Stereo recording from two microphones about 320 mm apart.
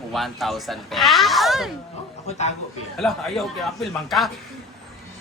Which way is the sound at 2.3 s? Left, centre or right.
Left.